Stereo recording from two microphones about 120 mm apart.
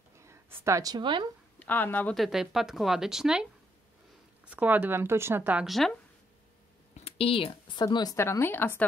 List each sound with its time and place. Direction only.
0.2 s a sound: 25° right (ahead or behind)
0.7 s a woman's voice: 30° right (ahead or behind)
1.6 s speech: 15° left (ahead or behind)
2.1 s speech: 5° right (ahead or behind)
4.5 s speech: 15° right (ahead or behind)
5.7 s speech: centre (ahead or behind)
6.9 s speech: 55° left (ahead or behind); by 8.8 s 15° left (ahead or behind)